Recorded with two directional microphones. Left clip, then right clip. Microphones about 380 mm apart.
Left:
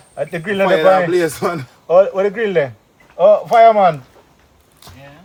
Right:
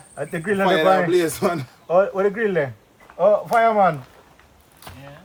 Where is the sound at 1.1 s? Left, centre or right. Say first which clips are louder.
Left 3 dB; centre.